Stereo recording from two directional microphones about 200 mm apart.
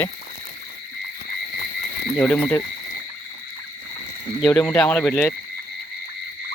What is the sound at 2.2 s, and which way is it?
Speech, 10° left (ahead or behind).